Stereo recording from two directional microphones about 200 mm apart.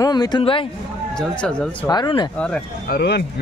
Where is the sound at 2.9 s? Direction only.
55° left (ahead or behind).